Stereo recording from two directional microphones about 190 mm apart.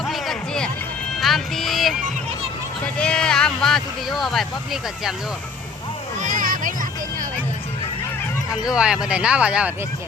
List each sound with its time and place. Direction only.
0.0 s music: centre (ahead or behind)
2.8 s speech: 5° left (ahead or behind)
6.2 s a sound: 45° right (ahead or behind)
8.6 s speech: 5° right (ahead or behind)